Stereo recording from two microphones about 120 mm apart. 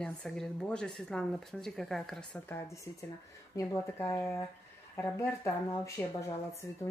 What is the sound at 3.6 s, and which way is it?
A woman's voice, 25° left (ahead or behind).